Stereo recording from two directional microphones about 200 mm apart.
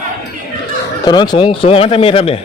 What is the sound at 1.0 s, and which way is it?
Speech, 20° left (ahead or behind).